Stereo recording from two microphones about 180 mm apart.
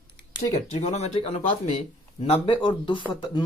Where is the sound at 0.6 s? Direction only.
40° left (ahead or behind).